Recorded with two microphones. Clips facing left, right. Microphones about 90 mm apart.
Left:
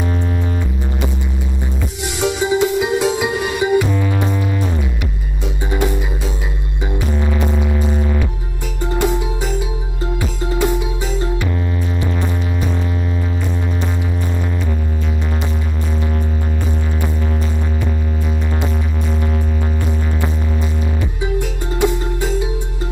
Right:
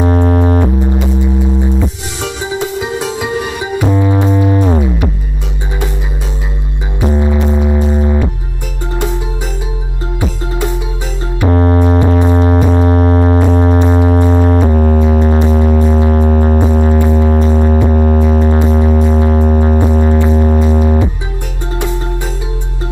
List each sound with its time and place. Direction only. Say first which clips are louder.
0.0 s music: right 10 dB; 50° right (ahead or behind)
2.8 s music: left 2 dB; 15° left (ahead or behind)
3.8 s music: right 7 dB; 25° right (ahead or behind)
7.0 s music: right 8 dB; 20° right (ahead or behind)
11.4 s music: right 11 dB; 55° right (ahead or behind)
12.0 s music: right 11 dB; 50° right (ahead or behind)